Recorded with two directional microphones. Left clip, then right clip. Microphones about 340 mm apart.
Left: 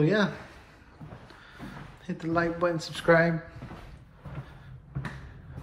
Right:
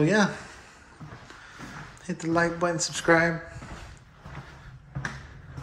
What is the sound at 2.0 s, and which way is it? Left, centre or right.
Speech, centre.